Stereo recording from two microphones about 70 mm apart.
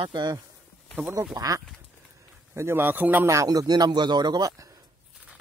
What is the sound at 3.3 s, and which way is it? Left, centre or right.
Speech, right.